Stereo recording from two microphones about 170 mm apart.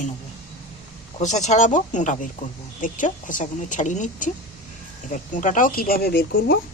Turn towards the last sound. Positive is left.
turn(degrees=65)  # may be behind; listen again after turning